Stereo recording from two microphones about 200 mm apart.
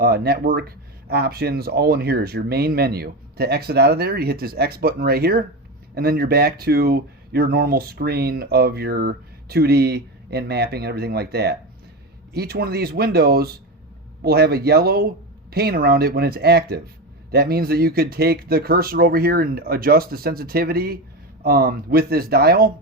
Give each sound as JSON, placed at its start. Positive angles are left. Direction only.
{"t": 0.0, "sound": "speech", "side_deg": -50}